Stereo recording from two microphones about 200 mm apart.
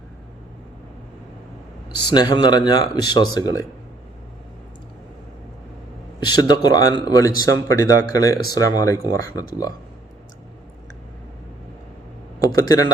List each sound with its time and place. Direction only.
2.0 s speech: 20° left (ahead or behind)
6.1 s speech: 20° left (ahead or behind)
12.4 s a sound: 20° left (ahead or behind)